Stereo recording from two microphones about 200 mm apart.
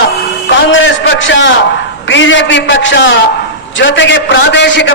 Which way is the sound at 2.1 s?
65° left (ahead or behind).